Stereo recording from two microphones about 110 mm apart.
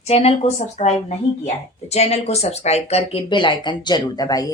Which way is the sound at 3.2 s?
45° left (ahead or behind).